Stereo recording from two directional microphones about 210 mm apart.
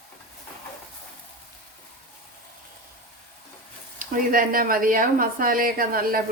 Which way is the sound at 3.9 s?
40° right (ahead or behind).